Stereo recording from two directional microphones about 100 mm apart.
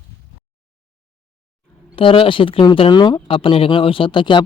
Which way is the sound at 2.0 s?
60° left (ahead or behind).